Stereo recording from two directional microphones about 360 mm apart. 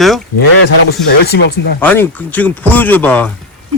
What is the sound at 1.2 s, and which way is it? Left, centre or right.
Speech, left.